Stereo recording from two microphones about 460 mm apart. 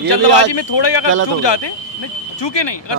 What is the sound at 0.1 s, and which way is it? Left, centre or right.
Speech, left.